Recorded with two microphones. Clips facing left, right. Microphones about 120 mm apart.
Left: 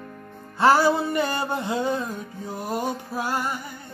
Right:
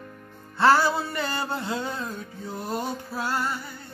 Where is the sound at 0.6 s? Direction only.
15° left (ahead or behind).